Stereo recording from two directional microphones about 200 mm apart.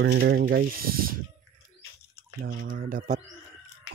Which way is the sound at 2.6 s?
45° right (ahead or behind).